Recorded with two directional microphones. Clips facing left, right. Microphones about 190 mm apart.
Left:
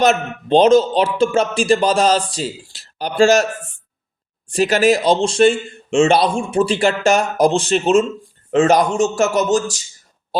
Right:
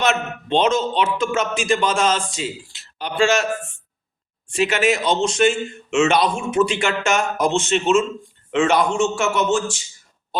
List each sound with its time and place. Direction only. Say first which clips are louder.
0.0 s a man's voice: left 5 dB; 40° left (ahead or behind)